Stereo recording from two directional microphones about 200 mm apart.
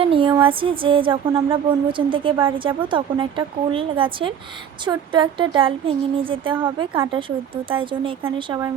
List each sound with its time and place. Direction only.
0.0 s music: 25° right (ahead or behind)
8.4 s a woman's voice: 15° right (ahead or behind)